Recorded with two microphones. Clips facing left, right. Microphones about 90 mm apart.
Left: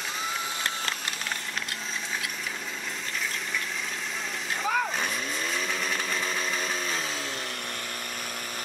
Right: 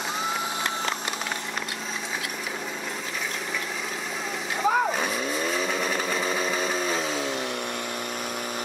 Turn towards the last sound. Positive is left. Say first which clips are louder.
# right 6 dB
turn(degrees=-5)  # may be behind; listen again after turning